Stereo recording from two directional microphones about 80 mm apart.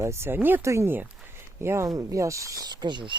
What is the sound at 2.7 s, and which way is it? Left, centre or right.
Speech, right.